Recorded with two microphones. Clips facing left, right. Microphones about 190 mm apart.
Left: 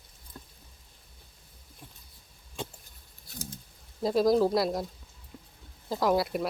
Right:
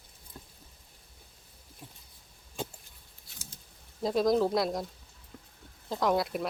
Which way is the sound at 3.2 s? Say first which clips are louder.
Left 11 dB; 40° left (ahead or behind).